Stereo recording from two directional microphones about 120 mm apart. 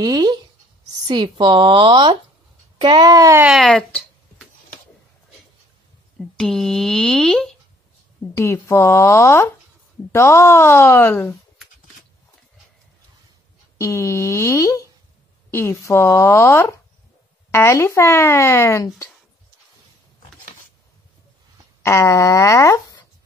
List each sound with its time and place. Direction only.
0.0 s speech: 35° right (ahead or behind)
3.6 s a sound: 5° left (ahead or behind)
6.1 s speech: 5° left (ahead or behind)
8.4 s speech: 25° left (ahead or behind)
13.7 s speech: 25° left (ahead or behind)
21.8 s speech: 25° left (ahead or behind)